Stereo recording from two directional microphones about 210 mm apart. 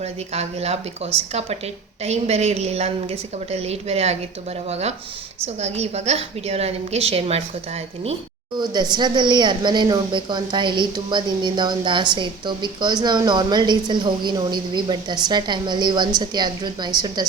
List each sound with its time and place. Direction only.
0.0 s a woman's voice: 30° right (ahead or behind)
8.5 s speech: 20° right (ahead or behind)